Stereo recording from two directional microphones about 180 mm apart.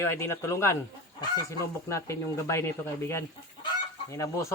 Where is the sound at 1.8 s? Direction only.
15° left (ahead or behind).